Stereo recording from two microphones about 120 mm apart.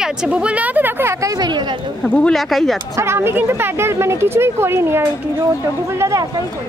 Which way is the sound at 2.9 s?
20° right (ahead or behind).